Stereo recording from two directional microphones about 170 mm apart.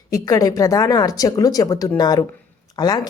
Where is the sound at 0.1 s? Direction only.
20° left (ahead or behind).